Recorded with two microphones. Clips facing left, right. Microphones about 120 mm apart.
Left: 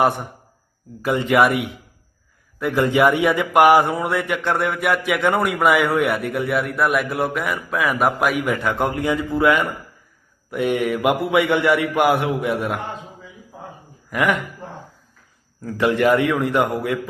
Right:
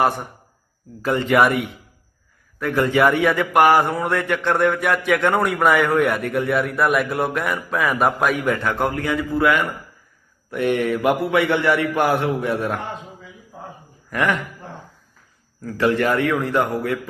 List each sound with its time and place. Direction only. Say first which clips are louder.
1.0 s a man's voice: even; 15° left (ahead or behind)
14.1 s a man's voice: left 1 dB; 10° left (ahead or behind)
15.6 s a man's voice: left 1 dB; 15° left (ahead or behind)